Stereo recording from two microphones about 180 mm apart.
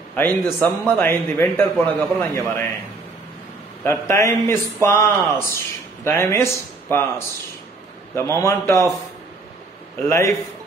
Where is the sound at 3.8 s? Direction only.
15° left (ahead or behind).